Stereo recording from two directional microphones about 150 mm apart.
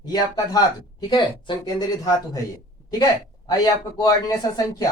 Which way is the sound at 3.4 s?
25° left (ahead or behind).